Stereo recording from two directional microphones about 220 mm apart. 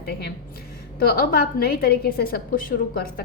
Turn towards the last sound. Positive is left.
turn(degrees=40)  # may be behind; listen again after turning